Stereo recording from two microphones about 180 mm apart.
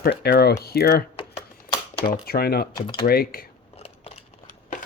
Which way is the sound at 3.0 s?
55° left (ahead or behind).